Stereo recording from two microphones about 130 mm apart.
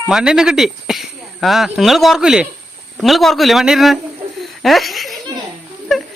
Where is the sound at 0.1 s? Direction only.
5° right (ahead or behind).